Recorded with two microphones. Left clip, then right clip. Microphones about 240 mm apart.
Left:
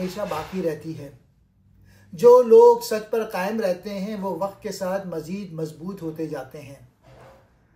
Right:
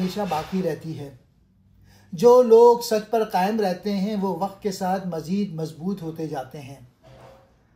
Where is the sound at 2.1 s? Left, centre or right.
Right.